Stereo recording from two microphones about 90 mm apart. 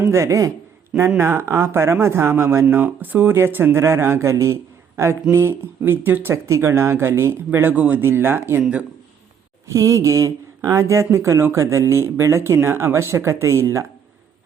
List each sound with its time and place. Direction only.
0.0 s speech: 35° right (ahead or behind)
0.9 s speech: 25° right (ahead or behind)
8.6 s speech: 10° right (ahead or behind)
9.7 s speech: 35° right (ahead or behind)